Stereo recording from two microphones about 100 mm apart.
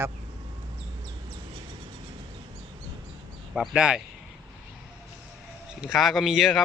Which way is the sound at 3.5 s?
10° right (ahead or behind).